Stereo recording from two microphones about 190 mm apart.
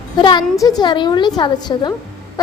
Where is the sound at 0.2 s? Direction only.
25° left (ahead or behind).